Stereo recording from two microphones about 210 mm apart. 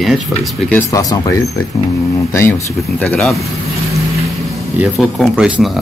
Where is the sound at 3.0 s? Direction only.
Centre (ahead or behind).